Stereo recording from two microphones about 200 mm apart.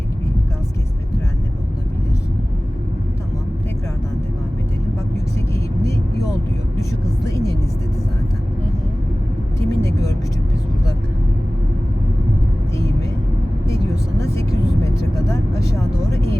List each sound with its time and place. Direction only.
5.5 s vehicle: 15° left (ahead or behind)
7.3 s vehicle: 15° left (ahead or behind)
9.6 s vehicle: 15° left (ahead or behind)
13.7 s vehicle: 15° left (ahead or behind)